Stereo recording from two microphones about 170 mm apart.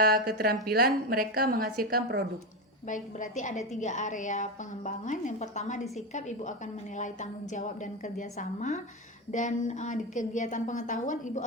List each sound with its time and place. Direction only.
0.0 s a woman's voice: 60° right (ahead or behind)
2.8 s a woman's voice: 50° left (ahead or behind)